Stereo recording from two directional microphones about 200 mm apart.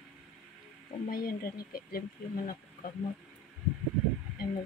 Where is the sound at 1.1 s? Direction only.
45° left (ahead or behind).